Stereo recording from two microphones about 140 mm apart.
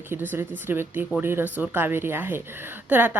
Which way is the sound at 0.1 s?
15° right (ahead or behind).